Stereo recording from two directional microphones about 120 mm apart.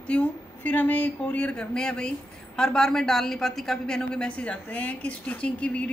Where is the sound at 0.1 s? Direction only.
10° left (ahead or behind).